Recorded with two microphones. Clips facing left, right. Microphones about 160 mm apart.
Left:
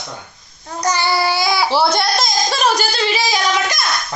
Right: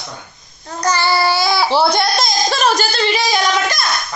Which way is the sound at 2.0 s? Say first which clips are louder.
Right 1 dB; 5° left (ahead or behind).